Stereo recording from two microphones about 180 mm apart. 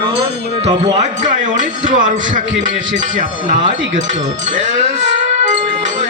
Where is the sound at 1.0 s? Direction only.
45° right (ahead or behind).